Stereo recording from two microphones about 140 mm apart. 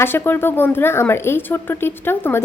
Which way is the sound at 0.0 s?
15° left (ahead or behind).